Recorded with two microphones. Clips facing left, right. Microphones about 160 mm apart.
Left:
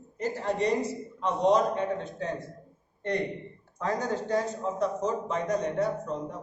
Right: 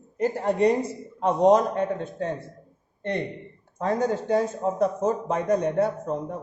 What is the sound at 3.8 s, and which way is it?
A man's voice, 55° right (ahead or behind).